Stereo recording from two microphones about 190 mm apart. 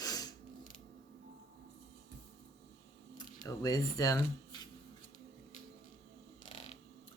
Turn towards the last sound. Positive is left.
turn(degrees=30)  # may be behind; listen again after turning